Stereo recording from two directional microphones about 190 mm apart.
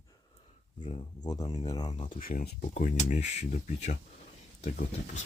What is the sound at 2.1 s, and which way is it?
Speech, 45° left (ahead or behind).